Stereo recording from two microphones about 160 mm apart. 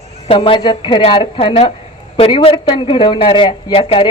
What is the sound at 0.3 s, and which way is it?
Speech, 35° left (ahead or behind).